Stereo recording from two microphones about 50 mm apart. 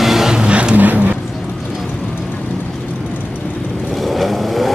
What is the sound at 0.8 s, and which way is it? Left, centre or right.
Vehicle, right.